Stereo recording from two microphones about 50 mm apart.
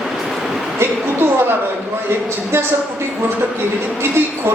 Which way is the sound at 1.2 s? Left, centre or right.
Right.